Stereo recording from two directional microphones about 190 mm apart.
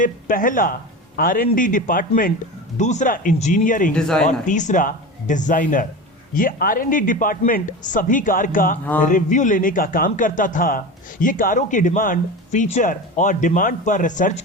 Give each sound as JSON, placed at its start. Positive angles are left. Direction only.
{"t": 0.0, "sound": "speech", "side_deg": 45}
{"t": 3.9, "sound": "speech", "side_deg": 5}
{"t": 4.3, "sound": "speech", "side_deg": 40}